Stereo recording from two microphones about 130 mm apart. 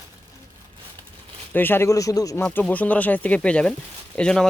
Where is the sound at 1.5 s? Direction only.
15° left (ahead or behind).